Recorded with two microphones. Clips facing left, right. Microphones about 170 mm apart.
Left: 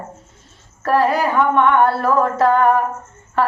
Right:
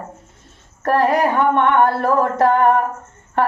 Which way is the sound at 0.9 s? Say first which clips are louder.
Even; 55° right (ahead or behind).